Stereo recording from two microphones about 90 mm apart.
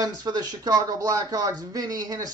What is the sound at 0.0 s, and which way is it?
Speech, 50° right (ahead or behind).